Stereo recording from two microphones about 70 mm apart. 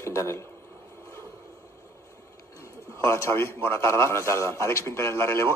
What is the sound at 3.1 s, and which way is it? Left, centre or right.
A man's voice, left.